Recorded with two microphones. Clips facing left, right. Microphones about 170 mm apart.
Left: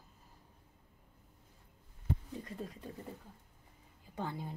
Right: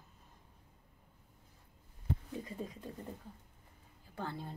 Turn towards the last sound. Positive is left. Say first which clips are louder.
# left 2 dB
turn(degrees=15)  # may be behind; listen again after turning